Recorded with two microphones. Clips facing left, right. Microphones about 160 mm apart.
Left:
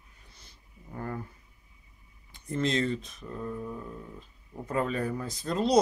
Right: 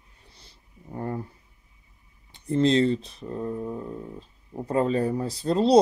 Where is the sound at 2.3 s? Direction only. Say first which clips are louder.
Right 8 dB; 30° right (ahead or behind).